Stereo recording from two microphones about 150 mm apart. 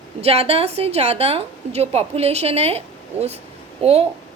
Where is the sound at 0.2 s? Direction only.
40° right (ahead or behind).